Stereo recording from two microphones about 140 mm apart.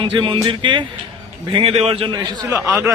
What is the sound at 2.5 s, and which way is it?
Speech, 20° right (ahead or behind).